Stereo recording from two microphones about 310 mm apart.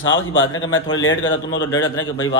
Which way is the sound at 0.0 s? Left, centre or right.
Left.